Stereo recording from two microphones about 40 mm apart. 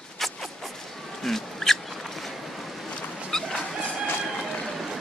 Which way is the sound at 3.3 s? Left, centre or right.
Centre.